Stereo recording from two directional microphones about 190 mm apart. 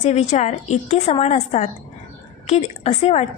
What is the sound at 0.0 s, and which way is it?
Speech, 35° left (ahead or behind).